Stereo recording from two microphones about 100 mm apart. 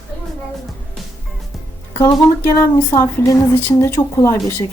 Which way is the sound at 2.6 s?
30° left (ahead or behind).